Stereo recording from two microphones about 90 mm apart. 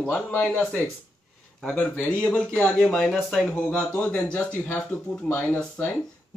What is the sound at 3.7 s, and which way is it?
A man's voice, 15° left (ahead or behind).